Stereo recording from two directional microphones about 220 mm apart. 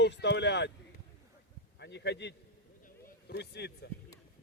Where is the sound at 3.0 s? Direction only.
50° left (ahead or behind).